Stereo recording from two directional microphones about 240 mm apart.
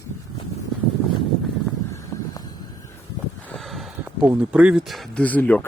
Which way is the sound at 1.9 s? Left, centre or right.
Centre.